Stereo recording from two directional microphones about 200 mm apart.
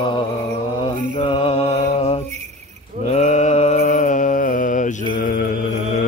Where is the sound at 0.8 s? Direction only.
25° left (ahead or behind).